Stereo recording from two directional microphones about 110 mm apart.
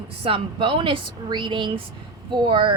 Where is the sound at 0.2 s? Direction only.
55° right (ahead or behind).